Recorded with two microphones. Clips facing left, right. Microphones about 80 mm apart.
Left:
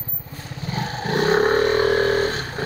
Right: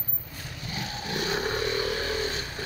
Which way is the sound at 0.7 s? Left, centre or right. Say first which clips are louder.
Left 9 dB; left.